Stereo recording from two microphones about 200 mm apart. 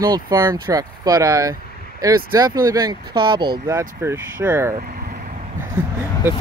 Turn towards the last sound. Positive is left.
turn(degrees=-10)  # may be behind; listen again after turning